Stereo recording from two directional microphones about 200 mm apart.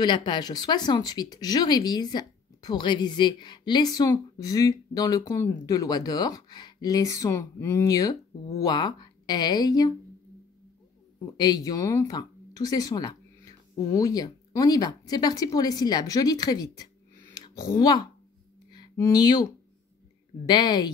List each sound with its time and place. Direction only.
0.0 s speech: 25° left (ahead or behind)
11.3 s speech: 20° left (ahead or behind)
17.3 s a sound: 20° left (ahead or behind)
20.4 s speech: 20° left (ahead or behind)